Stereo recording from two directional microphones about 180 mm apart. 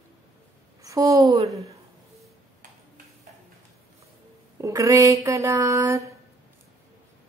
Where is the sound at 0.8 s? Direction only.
20° right (ahead or behind).